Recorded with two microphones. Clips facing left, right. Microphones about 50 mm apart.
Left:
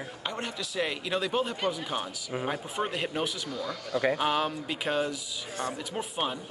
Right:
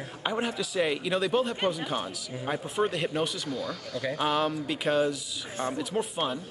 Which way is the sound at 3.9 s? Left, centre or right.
Left.